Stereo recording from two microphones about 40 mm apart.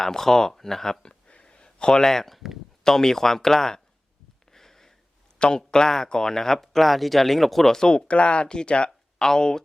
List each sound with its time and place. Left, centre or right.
0.0 s speech: centre
1.0 s a sound: left; by 2.5 s centre
2.8 s speech: centre
4.5 s sniff: centre
5.4 s speech: left